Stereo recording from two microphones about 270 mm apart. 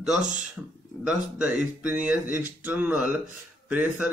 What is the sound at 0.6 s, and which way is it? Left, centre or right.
Speech, centre.